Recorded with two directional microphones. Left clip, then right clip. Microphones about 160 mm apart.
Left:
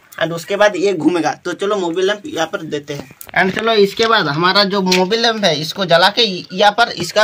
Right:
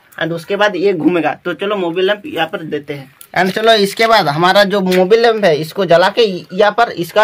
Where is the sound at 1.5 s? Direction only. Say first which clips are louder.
Right 1 dB; 75° right (ahead or behind).